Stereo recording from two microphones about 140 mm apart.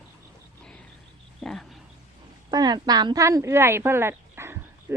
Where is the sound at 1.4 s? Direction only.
Centre (ahead or behind).